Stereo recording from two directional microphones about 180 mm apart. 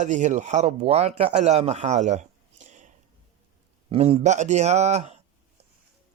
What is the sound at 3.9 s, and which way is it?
Speech, 35° right (ahead or behind).